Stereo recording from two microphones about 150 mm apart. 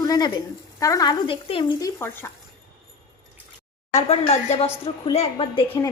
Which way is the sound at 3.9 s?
45° left (ahead or behind).